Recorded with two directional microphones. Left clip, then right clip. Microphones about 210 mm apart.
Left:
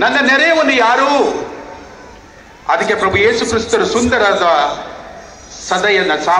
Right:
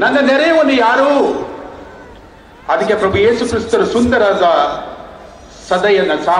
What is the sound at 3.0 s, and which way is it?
Speech, 55° right (ahead or behind).